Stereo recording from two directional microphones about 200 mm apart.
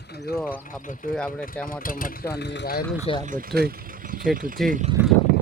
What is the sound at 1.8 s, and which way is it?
Speech, 45° left (ahead or behind).